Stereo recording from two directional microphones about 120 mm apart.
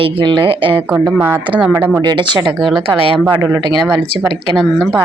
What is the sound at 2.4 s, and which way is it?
Speech, 5° right (ahead or behind).